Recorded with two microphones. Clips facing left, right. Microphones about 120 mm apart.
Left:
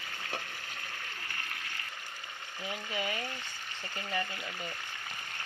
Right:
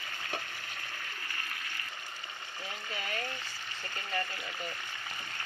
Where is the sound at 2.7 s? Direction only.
15° left (ahead or behind).